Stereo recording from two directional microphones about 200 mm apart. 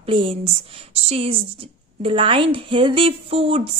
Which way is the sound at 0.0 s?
25° right (ahead or behind).